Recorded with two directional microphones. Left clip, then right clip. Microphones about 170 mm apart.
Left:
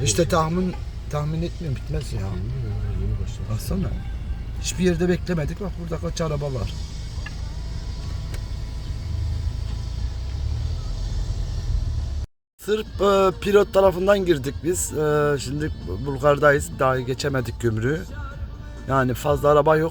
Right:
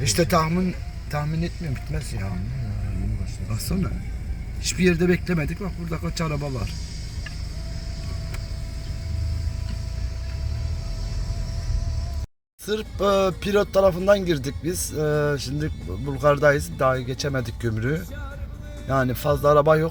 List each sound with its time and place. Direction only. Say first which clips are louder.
0.2 s speech: even; 5° right (ahead or behind)
3.7 s speech: even; 5° left (ahead or behind)
12.6 s speech: left 2 dB; centre (ahead or behind)